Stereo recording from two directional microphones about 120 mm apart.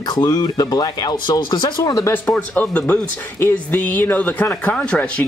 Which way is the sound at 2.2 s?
15° left (ahead or behind).